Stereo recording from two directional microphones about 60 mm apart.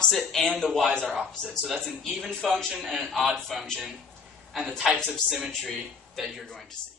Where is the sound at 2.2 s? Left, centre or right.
Centre.